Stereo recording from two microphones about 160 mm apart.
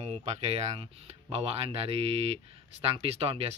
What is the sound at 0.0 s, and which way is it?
Speech, 40° right (ahead or behind).